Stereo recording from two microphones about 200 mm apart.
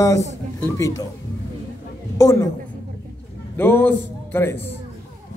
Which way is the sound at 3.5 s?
10° left (ahead or behind).